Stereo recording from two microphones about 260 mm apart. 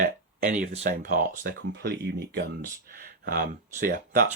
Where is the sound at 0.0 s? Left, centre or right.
Right.